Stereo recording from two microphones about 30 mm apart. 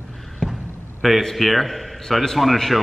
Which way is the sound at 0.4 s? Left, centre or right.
Centre.